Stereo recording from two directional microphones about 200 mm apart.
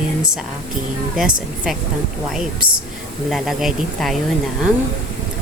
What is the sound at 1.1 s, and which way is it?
Speech, centre (ahead or behind).